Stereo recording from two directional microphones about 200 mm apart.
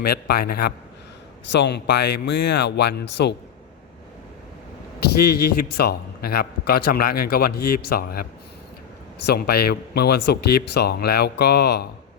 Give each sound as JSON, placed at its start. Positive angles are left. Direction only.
{"t": 0.0, "sound": "a man's voice", "side_deg": 50}
{"t": 5.2, "sound": "a man's voice", "side_deg": 50}